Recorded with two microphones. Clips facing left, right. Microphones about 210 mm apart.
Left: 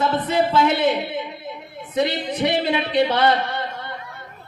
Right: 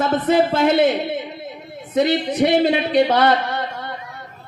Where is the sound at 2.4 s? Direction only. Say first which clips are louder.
Right 5 dB; 50° right (ahead or behind).